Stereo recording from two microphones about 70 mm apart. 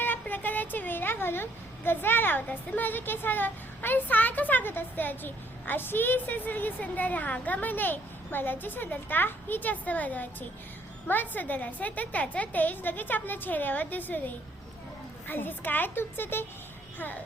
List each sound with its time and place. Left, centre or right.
0.0 s speech: left